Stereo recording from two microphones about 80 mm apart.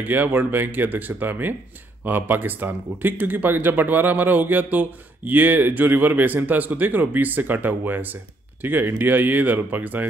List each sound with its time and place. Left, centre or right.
0.0 s speech: right